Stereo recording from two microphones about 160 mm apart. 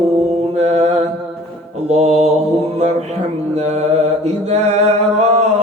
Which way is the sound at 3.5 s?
45° right (ahead or behind).